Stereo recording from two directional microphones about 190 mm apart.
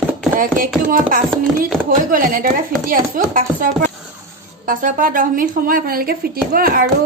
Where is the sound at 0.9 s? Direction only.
45° right (ahead or behind).